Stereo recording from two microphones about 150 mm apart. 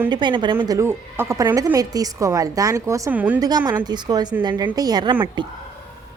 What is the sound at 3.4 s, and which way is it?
A woman's voice, 25° right (ahead or behind).